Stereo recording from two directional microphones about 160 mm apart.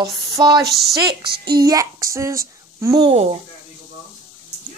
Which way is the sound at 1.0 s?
75° right (ahead or behind).